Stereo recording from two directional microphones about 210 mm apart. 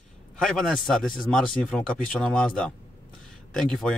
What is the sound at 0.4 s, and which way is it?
Speech, centre (ahead or behind).